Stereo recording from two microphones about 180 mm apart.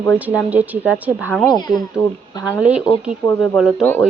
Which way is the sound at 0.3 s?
10° right (ahead or behind).